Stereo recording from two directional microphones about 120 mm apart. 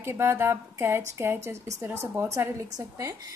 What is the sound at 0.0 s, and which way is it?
A woman's voice, 20° right (ahead or behind).